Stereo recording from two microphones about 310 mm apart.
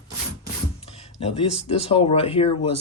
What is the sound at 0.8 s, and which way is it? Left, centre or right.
Speech, centre.